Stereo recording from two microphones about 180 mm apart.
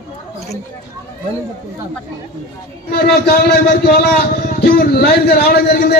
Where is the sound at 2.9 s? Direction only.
60° left (ahead or behind).